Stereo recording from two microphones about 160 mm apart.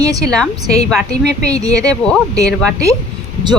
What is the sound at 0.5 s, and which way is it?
Speech, 25° right (ahead or behind).